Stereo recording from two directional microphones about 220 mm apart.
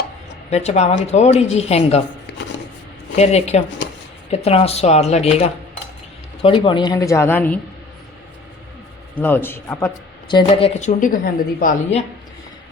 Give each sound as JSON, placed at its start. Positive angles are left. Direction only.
{"t": 0.5, "sound": "speech", "side_deg": 30}
{"t": 3.2, "sound": "speech", "side_deg": 30}
{"t": 9.1, "sound": "speech", "side_deg": 10}